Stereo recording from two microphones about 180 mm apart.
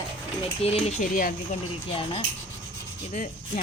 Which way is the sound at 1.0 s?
50° left (ahead or behind).